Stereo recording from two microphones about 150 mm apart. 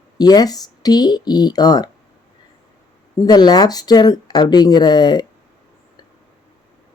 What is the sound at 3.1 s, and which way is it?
Speech, 25° left (ahead or behind).